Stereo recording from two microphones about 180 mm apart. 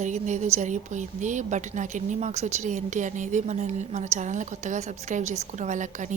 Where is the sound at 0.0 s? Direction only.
40° right (ahead or behind).